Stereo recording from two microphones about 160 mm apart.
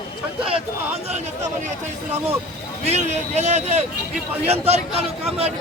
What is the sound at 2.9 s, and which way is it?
A man's voice, 45° right (ahead or behind).